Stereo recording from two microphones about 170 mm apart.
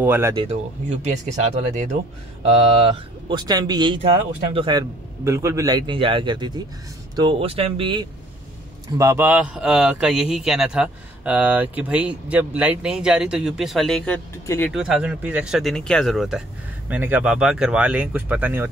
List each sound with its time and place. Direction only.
0.0 s speech: 15° right (ahead or behind)
0.4 s a man's voice: 40° right (ahead or behind)
8.9 s a man's voice: 15° right (ahead or behind); by 14.2 s 5° left (ahead or behind)
14.4 s speech: 15° left (ahead or behind)
14.7 s a man's voice: 5° right (ahead or behind)